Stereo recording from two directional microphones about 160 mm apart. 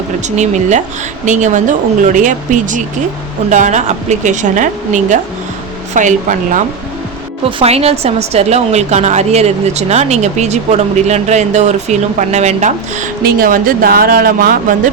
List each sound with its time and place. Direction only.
0.3 s a woman's voice: 50° right (ahead or behind)
7.6 s a woman's voice: 40° right (ahead or behind)
13.2 s speech: 65° right (ahead or behind)